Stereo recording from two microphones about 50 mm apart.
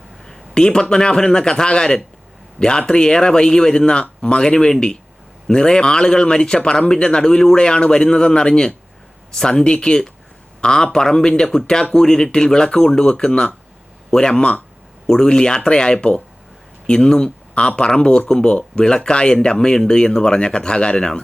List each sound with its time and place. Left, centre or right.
0.3 s a man's voice: centre